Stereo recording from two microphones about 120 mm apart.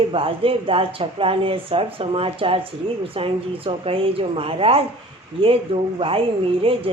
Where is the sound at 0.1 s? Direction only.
50° right (ahead or behind).